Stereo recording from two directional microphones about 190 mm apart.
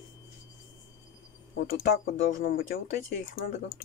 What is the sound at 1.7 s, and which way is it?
Speech, 50° left (ahead or behind).